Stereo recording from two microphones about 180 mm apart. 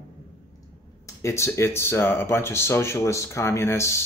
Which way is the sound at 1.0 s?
15° left (ahead or behind).